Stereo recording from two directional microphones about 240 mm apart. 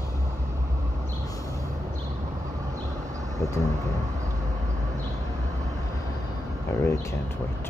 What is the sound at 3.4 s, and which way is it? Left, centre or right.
Speech, centre.